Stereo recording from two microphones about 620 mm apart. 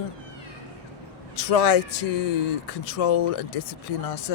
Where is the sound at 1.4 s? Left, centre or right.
Left.